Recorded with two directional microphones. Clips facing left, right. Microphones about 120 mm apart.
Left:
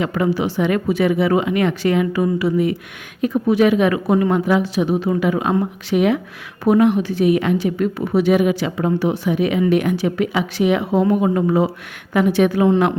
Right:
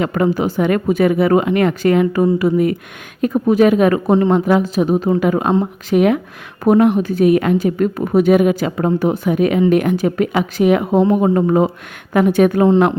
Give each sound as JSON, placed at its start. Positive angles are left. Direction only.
{"t": 0.0, "sound": "a woman's voice", "side_deg": -45}
{"t": 4.4, "sound": "a woman's voice", "side_deg": -50}
{"t": 12.6, "sound": "speech", "side_deg": -35}